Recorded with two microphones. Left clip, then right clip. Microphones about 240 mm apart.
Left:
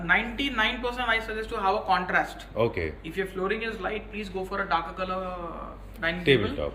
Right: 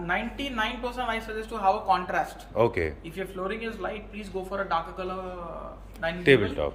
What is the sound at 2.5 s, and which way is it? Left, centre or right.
Speech, centre.